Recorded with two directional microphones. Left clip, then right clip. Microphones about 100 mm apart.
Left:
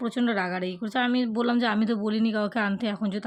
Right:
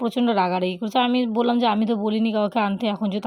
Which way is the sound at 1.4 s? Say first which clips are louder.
Right 6 dB; 30° right (ahead or behind).